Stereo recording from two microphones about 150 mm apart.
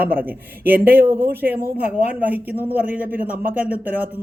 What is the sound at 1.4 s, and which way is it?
Speech, 90° right.